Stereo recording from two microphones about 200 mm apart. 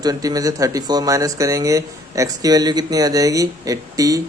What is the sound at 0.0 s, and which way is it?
Speech, 20° right (ahead or behind).